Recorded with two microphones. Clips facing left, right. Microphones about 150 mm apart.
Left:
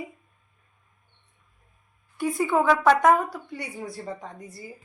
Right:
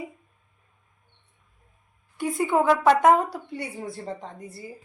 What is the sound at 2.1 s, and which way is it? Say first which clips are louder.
A woman's voice: even; 20° right (ahead or behind).